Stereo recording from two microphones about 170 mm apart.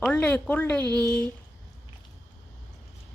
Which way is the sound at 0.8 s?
20° right (ahead or behind).